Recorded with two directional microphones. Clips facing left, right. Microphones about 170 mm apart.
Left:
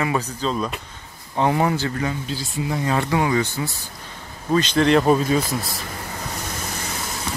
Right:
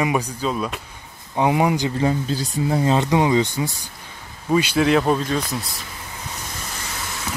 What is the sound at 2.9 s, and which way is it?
Speech, 20° right (ahead or behind).